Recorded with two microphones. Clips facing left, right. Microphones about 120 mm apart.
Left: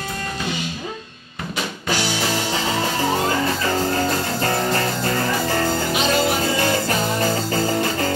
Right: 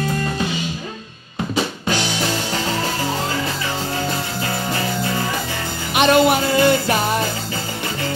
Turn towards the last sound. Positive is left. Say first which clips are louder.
# right 5 dB
turn(degrees=-60)  # may be behind; listen again after turning